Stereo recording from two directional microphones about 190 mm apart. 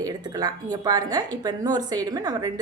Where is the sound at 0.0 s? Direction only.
20° right (ahead or behind).